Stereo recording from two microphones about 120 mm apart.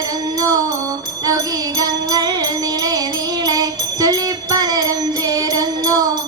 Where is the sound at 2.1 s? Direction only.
30° right (ahead or behind).